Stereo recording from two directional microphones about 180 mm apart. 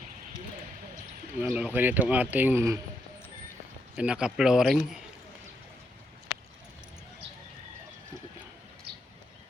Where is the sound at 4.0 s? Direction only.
5° right (ahead or behind).